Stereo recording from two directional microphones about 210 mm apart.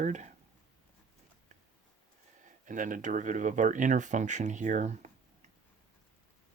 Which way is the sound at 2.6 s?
40° right (ahead or behind).